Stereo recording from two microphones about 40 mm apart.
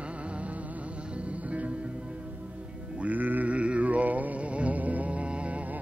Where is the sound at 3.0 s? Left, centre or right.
Right.